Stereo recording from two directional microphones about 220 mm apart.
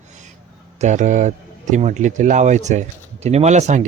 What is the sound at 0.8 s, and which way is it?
A man's voice, 35° right (ahead or behind).